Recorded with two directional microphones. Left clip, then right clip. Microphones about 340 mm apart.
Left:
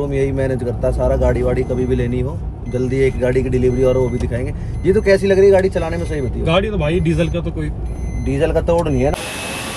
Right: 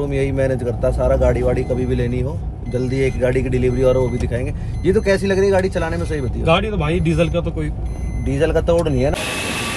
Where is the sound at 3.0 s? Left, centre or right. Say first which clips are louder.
Left 2 dB; right.